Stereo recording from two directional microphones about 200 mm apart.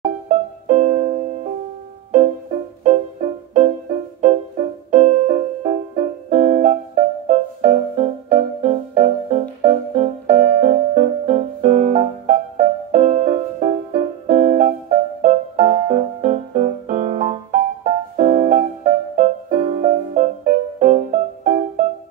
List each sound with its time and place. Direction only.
0.3 s music: 35° right (ahead or behind)